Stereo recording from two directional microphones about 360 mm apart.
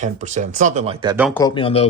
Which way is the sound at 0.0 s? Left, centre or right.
Centre.